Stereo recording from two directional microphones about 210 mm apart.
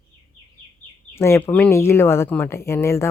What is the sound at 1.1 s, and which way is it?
Speech, 10° left (ahead or behind).